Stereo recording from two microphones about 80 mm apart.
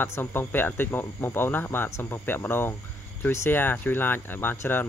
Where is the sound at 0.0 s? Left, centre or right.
Left.